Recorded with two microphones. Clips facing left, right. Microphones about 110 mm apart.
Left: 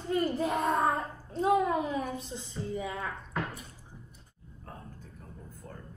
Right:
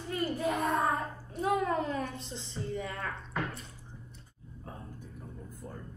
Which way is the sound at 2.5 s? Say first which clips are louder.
Left 2 dB; 5° left (ahead or behind).